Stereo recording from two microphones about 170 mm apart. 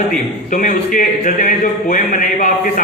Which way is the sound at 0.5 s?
50° left (ahead or behind).